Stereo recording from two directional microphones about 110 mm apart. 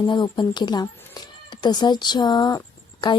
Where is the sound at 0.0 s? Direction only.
45° left (ahead or behind).